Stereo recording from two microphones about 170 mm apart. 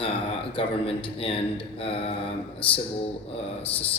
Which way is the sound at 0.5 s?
30° left (ahead or behind).